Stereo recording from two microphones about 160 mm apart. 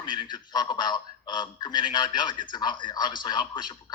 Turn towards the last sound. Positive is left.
turn(degrees=30)  # may be behind; listen again after turning